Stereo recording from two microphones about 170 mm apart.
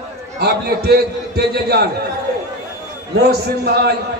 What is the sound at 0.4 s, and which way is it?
A man's voice, 70° right (ahead or behind).